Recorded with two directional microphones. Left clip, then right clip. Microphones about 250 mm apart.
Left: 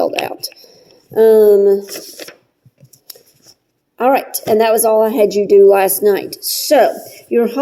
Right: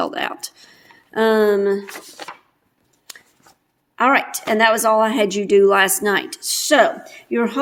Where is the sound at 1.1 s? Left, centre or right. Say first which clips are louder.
Left 8 dB; right.